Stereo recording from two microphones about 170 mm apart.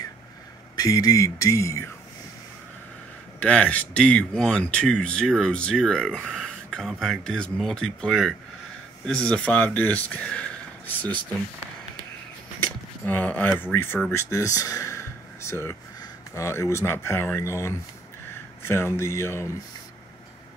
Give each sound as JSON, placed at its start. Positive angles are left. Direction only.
{"t": 0.7, "sound": "speech", "side_deg": 20}
{"t": 3.3, "sound": "speech", "side_deg": 5}
{"t": 13.0, "sound": "speech", "side_deg": 10}